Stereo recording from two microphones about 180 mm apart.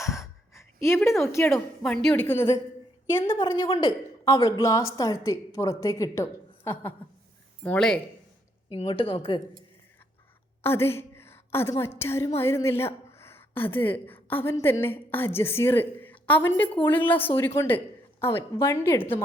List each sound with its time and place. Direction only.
0.0 s speech: 15° left (ahead or behind)
3.3 s a woman's voice: 30° left (ahead or behind)
4.3 s a woman's voice: 20° left (ahead or behind)
7.6 s speech: 5° left (ahead or behind)
8.7 s speech: 30° left (ahead or behind)
10.6 s a woman's voice: 15° left (ahead or behind)